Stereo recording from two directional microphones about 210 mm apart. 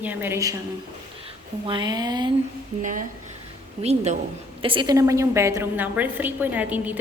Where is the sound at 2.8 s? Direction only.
35° right (ahead or behind).